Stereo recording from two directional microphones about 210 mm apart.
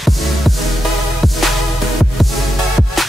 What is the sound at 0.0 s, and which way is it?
Music, centre (ahead or behind).